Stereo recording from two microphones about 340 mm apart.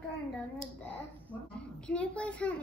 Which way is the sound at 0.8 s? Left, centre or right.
Centre.